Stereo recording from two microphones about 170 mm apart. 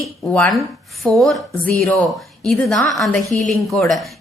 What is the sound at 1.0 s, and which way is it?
A woman's voice, centre (ahead or behind).